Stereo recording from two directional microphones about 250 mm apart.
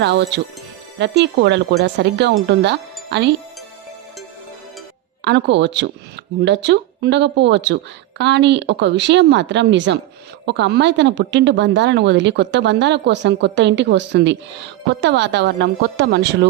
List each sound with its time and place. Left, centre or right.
0.0 s a woman's voice: right
5.2 s a woman's voice: right